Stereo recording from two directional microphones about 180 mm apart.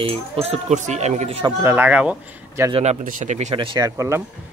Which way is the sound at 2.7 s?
40° right (ahead or behind).